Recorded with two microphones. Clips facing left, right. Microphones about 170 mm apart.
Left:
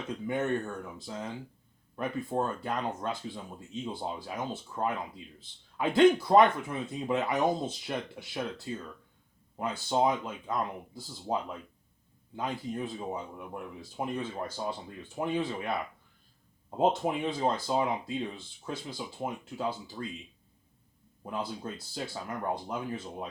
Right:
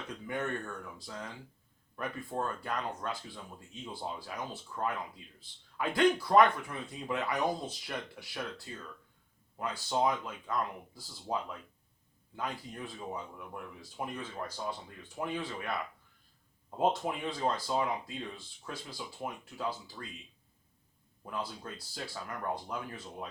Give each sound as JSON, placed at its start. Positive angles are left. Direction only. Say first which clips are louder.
{"t": 0.1, "sound": "speech", "louder": "left 6 dB", "side_deg": 25}
{"t": 21.2, "sound": "speech", "louder": "left 4 dB", "side_deg": 25}